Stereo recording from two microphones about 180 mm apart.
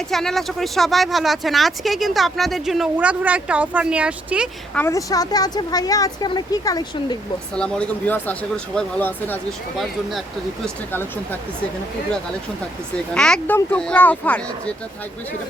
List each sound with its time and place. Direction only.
0.1 s speech: centre (ahead or behind)
4.7 s speech: 15° left (ahead or behind)
7.5 s speech: 5° left (ahead or behind)
9.7 s speech: centre (ahead or behind)
13.1 s speech: 5° left (ahead or behind)